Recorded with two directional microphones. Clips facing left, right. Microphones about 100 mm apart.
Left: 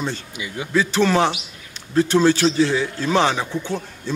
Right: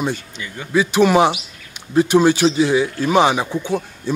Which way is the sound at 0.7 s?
15° right (ahead or behind).